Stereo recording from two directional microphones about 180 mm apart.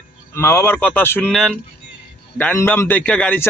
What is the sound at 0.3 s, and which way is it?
A man's voice, 15° left (ahead or behind).